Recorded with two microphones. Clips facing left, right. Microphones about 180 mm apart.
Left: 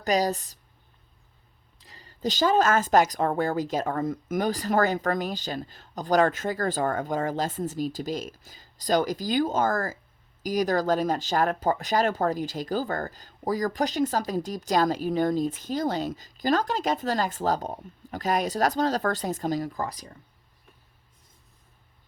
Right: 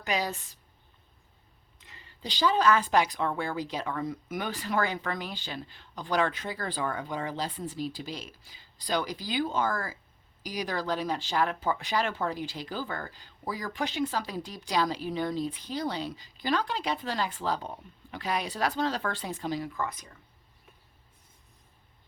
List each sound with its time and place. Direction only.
0.0 s speech: 40° left (ahead or behind)
1.8 s speech: 35° left (ahead or behind)